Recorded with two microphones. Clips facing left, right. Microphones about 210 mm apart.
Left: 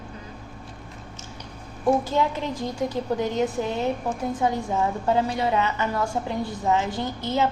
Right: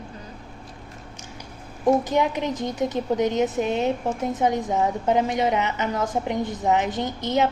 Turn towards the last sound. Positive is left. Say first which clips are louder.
# right 2 dB
turn(degrees=-20)  # may be behind; listen again after turning